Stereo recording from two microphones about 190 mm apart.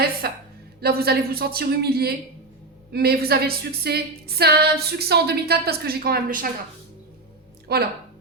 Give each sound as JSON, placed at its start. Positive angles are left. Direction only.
{"t": 0.2, "sound": "a woman's voice", "side_deg": -55}
{"t": 7.7, "sound": "a woman's voice", "side_deg": -55}